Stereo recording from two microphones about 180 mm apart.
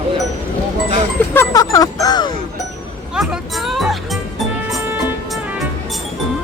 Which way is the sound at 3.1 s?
5° right (ahead or behind).